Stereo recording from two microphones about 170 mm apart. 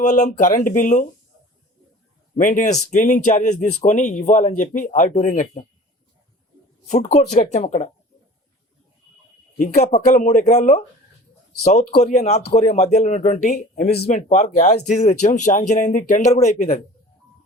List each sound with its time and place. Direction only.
0.0 s speech: 45° left (ahead or behind)
2.3 s speech: 50° left (ahead or behind)
6.8 s speech: 40° left (ahead or behind)
9.6 s speech: 45° left (ahead or behind)